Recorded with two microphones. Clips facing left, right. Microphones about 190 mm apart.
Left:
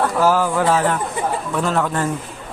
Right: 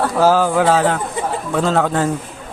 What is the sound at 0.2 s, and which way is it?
Speech, 90° right.